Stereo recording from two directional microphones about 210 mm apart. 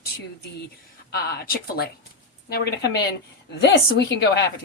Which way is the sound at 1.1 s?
45° left (ahead or behind).